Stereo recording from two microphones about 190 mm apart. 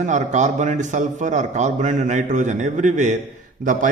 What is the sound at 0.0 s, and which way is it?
A man's voice, 40° right (ahead or behind).